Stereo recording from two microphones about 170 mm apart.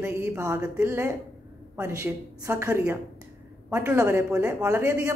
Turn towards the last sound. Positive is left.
turn(degrees=-15)  # may be behind; listen again after turning